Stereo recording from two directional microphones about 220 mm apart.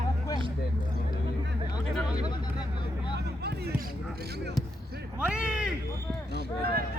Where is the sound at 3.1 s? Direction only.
45° right (ahead or behind).